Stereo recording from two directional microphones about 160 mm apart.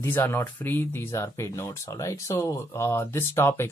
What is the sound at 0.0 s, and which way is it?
Speech, 15° left (ahead or behind).